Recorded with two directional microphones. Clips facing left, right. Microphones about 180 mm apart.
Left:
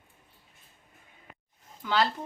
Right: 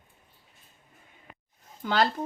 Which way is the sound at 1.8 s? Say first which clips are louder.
Right 2 dB; 45° right (ahead or behind).